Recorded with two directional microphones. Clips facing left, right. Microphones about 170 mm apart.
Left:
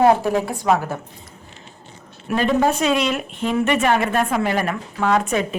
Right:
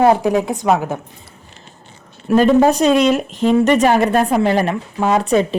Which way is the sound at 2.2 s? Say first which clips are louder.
Right 7 dB; 35° right (ahead or behind).